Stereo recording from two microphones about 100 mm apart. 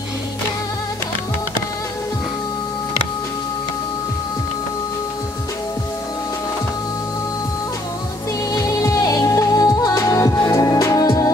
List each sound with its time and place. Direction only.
8.5 s music: 35° left (ahead or behind)